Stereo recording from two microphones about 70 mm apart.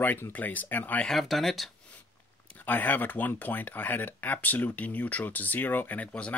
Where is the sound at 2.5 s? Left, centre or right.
Left.